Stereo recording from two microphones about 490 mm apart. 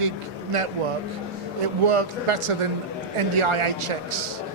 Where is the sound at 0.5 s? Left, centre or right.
Right.